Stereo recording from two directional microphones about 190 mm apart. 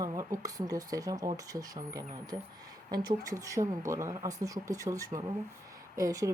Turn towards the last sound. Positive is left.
turn(degrees=-15)  # may be behind; listen again after turning